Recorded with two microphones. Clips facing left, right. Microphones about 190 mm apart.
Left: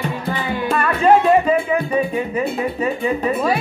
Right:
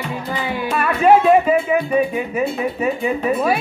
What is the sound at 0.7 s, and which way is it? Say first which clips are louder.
Music: right 1 dB; 10° right (ahead or behind).